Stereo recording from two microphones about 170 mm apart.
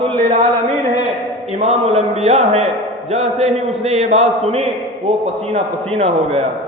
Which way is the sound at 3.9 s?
35° right (ahead or behind).